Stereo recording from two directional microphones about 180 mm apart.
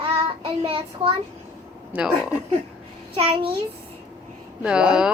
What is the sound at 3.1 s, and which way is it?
Speech, 30° right (ahead or behind).